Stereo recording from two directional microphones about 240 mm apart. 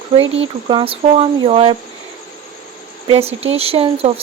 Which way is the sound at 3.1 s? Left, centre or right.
Right.